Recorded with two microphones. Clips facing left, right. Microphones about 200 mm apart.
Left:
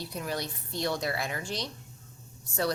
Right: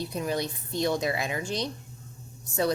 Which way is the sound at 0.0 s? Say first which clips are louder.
Right 5 dB; 20° right (ahead or behind).